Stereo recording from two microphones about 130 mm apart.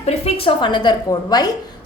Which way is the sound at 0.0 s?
55° left (ahead or behind).